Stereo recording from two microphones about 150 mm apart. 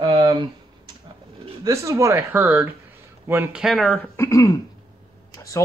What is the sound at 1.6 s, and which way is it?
Speech, 20° right (ahead or behind).